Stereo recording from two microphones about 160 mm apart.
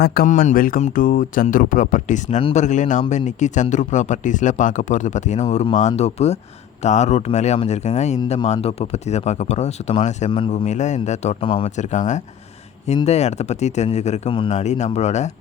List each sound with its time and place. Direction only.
0.0 s speech: 70° left (ahead or behind)
0.3 s speech: 55° left (ahead or behind); by 11.7 s 35° left (ahead or behind)
11.8 s speech: 50° left (ahead or behind); by 14.5 s 35° left (ahead or behind)
14.5 s speech: 45° left (ahead or behind)